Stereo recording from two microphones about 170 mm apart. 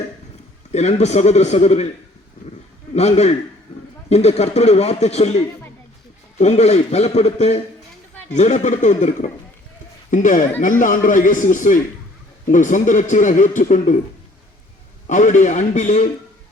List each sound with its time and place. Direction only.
0.7 s a man's voice: 40° left (ahead or behind)
2.9 s a man's voice: 40° left (ahead or behind)
15.0 s a man's voice: 45° left (ahead or behind)